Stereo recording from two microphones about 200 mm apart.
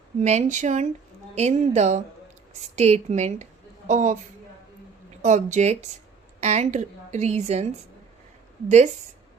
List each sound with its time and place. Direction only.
0.2 s a woman's voice: 35° right (ahead or behind)
5.2 s a woman's voice: 35° right (ahead or behind)